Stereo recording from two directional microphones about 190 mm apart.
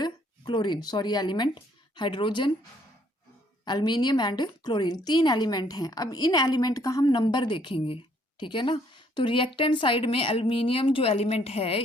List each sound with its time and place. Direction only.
0.0 s speech: 25° left (ahead or behind)
3.6 s a woman's voice: 25° left (ahead or behind)